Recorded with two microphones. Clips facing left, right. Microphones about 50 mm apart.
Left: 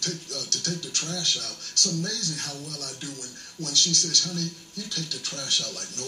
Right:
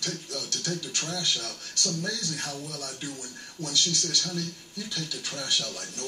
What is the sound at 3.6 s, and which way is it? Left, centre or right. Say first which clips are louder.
Speech: left 1 dB; centre.